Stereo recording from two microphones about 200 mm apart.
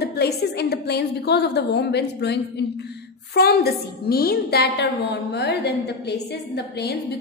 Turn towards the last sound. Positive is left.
turn(degrees=55)  # may be behind; listen again after turning